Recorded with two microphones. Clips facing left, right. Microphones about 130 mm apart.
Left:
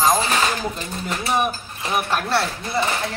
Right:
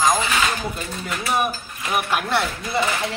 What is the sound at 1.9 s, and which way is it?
Speech, 10° right (ahead or behind).